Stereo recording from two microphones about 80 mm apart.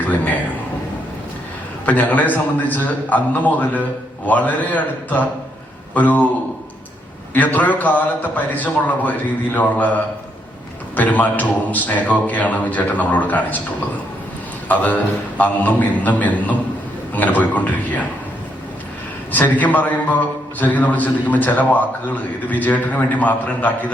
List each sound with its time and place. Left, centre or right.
0.0 s a sound: left
1.9 s a man's voice: centre
4.3 s a man's voice: centre
7.3 s a man's voice: left
14.7 s a man's voice: centre
19.3 s a man's voice: left